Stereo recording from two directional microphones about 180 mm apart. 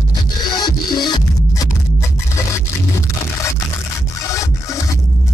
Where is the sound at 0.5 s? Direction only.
25° left (ahead or behind).